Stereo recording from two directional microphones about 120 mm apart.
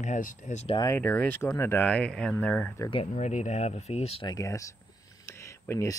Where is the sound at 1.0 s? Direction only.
15° left (ahead or behind).